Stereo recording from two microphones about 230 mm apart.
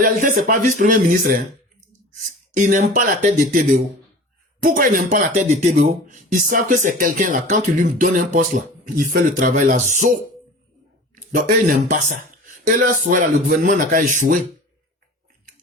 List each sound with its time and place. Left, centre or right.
0.0 s speech: right
2.5 s speech: right
11.1 s a sound: right
11.9 s speech: right